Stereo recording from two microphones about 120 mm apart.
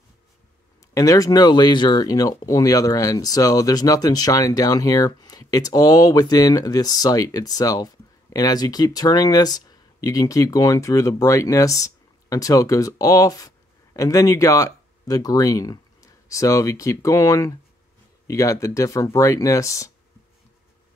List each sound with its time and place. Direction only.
0.9 s speech: 30° left (ahead or behind)